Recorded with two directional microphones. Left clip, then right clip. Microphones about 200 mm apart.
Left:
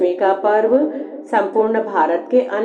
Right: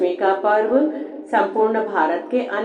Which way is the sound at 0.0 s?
40° left (ahead or behind).